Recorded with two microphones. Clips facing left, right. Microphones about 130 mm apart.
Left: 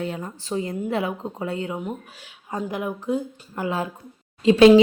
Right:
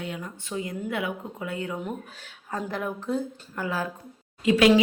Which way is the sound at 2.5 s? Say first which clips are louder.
Left 3 dB; 15° left (ahead or behind).